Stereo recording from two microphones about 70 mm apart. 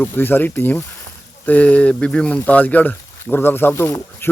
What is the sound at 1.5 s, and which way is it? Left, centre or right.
Speech, left.